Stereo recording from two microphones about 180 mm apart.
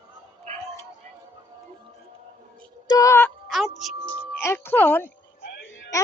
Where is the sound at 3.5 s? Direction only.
Centre (ahead or behind).